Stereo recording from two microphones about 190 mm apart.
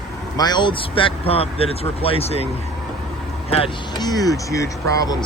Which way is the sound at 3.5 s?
30° left (ahead or behind).